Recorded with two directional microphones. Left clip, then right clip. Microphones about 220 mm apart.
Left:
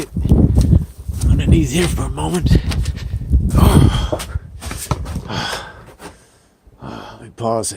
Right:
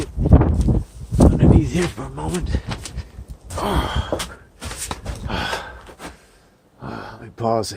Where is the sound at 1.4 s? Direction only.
35° left (ahead or behind).